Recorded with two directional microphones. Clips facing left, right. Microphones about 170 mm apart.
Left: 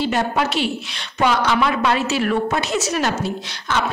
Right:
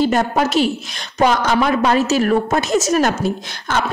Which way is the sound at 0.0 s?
45° right (ahead or behind).